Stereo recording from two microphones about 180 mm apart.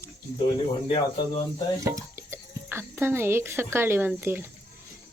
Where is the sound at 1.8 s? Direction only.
15° right (ahead or behind).